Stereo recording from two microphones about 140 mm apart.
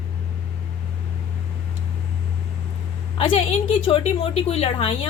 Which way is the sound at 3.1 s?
40° left (ahead or behind).